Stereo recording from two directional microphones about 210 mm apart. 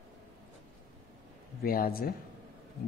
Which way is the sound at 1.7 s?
45° left (ahead or behind).